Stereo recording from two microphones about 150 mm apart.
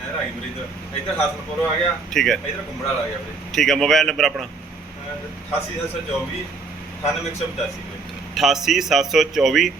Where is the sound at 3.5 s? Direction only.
Centre (ahead or behind).